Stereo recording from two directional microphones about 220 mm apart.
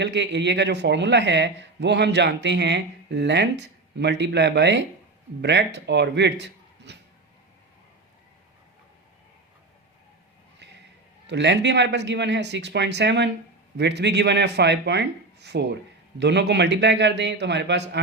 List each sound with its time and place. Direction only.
0.0 s a man's voice: 50° right (ahead or behind)
11.3 s speech: 50° right (ahead or behind)